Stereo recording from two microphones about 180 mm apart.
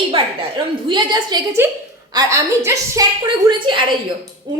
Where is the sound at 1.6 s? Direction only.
10° right (ahead or behind).